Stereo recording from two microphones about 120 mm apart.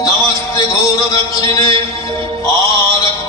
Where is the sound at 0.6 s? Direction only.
30° left (ahead or behind).